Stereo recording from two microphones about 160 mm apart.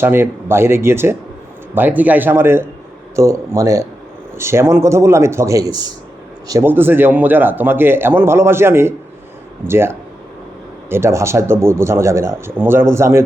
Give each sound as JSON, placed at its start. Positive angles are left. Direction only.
{"t": 0.0, "sound": "speech", "side_deg": -15}